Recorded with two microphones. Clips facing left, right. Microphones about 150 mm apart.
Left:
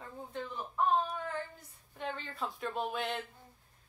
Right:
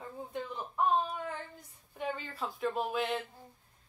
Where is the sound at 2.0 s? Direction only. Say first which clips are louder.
Right 2 dB; 10° right (ahead or behind).